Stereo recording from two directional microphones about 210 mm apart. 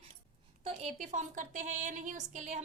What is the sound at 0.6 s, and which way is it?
A woman's voice, 30° right (ahead or behind).